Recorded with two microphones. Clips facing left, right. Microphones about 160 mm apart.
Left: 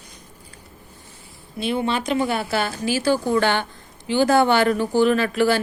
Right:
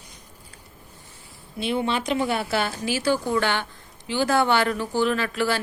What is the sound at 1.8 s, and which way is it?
Speech, 40° left (ahead or behind).